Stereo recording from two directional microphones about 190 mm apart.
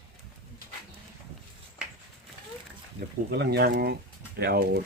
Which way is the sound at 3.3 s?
60° right (ahead or behind).